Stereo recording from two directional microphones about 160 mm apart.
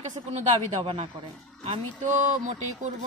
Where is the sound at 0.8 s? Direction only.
35° right (ahead or behind).